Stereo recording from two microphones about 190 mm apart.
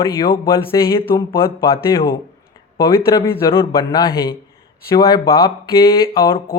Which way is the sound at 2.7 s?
15° left (ahead or behind).